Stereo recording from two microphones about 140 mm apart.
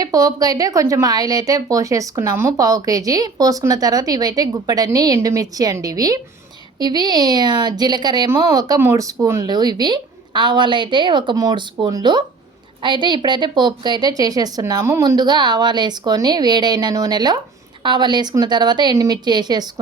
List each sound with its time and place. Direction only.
0.0 s a woman's voice: 25° right (ahead or behind)